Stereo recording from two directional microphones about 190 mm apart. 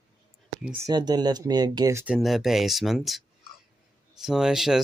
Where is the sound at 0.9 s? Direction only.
20° right (ahead or behind).